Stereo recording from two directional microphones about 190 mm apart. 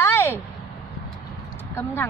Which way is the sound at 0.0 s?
10° left (ahead or behind).